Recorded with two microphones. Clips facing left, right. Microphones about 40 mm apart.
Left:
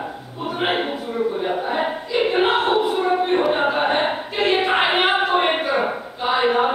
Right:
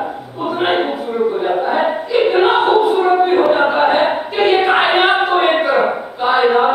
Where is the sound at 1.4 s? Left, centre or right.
Centre.